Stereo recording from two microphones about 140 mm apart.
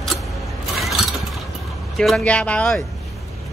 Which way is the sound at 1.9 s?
Centre (ahead or behind).